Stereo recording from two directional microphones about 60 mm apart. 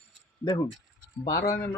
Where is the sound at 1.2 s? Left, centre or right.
Left.